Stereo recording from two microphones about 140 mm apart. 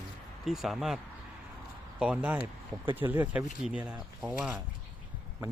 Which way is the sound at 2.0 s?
10° right (ahead or behind).